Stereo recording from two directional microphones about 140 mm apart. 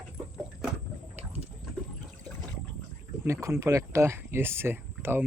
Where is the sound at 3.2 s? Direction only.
20° right (ahead or behind).